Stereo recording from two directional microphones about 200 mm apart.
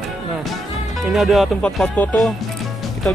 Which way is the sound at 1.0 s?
Centre (ahead or behind).